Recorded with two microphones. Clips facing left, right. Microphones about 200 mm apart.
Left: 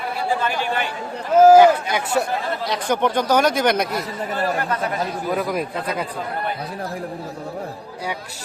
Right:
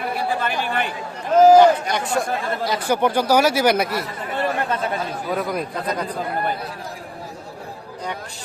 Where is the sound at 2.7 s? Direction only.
10° right (ahead or behind).